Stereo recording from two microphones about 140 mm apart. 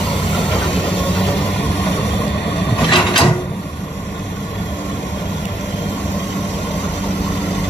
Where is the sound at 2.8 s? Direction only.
35° left (ahead or behind).